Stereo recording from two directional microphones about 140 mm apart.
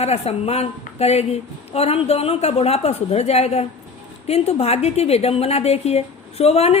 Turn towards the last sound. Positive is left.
turn(degrees=50)  # may be behind; listen again after turning